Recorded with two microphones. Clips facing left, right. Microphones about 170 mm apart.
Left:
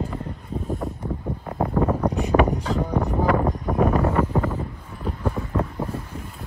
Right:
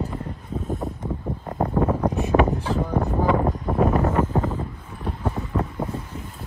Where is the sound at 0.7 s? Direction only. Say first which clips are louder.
Even; centre (ahead or behind).